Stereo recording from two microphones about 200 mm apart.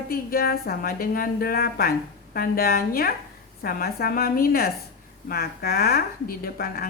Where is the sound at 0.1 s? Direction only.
50° left (ahead or behind).